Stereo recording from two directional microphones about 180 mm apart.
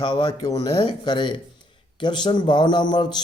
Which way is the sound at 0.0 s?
30° left (ahead or behind).